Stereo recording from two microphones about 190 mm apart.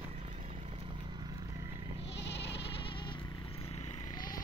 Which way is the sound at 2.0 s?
65° left (ahead or behind).